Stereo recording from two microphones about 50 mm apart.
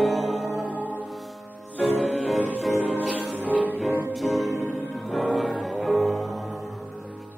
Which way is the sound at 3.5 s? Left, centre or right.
Right.